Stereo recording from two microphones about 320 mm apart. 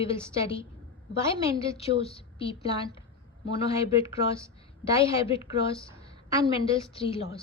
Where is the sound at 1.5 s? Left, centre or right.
Centre.